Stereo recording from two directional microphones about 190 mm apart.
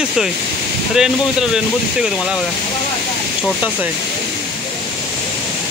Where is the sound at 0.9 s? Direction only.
5° right (ahead or behind).